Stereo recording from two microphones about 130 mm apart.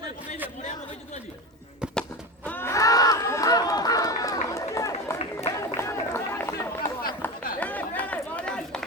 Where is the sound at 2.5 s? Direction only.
15° left (ahead or behind).